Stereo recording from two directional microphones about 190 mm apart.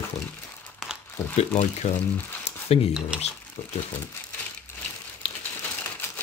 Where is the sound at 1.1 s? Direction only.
15° left (ahead or behind).